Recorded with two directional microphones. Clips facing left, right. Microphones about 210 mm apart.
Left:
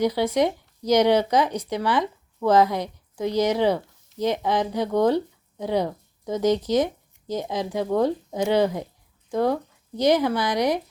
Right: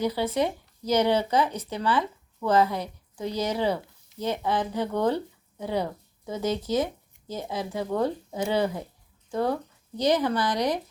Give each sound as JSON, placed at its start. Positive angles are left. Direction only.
{"t": 0.0, "sound": "speech", "side_deg": 15}